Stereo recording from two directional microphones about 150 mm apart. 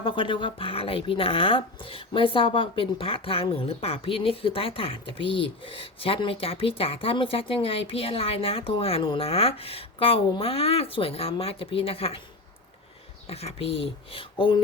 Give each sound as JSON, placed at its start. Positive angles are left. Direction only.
{"t": 0.0, "sound": "speech", "side_deg": 35}
{"t": 13.2, "sound": "speech", "side_deg": 40}